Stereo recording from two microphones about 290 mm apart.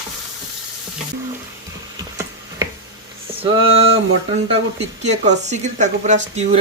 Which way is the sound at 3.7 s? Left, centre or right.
Right.